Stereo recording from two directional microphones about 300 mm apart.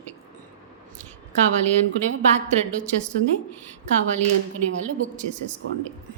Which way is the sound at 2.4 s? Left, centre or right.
Right.